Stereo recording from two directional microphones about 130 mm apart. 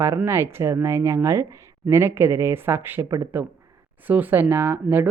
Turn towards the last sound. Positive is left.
turn(degrees=-15)  # may be behind; listen again after turning